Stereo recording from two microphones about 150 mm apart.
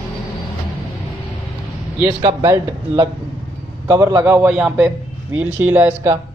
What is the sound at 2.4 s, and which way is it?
Speech, 25° right (ahead or behind).